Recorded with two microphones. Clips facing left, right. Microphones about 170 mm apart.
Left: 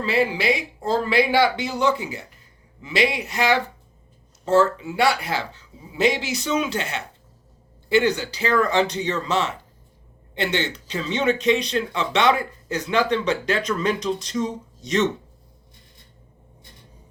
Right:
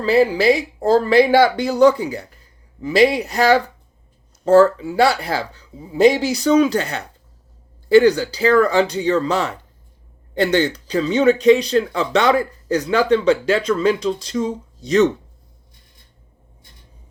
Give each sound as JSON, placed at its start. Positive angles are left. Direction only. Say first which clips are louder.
{"t": 0.0, "sound": "speech", "louder": "right 7 dB", "side_deg": -35}